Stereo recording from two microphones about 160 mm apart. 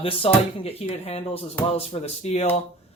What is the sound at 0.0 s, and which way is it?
Speech, 35° left (ahead or behind).